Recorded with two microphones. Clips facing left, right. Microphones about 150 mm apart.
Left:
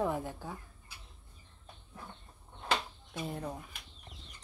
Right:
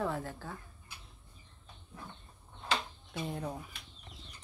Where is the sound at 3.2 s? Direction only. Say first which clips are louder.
Right 1 dB; centre (ahead or behind).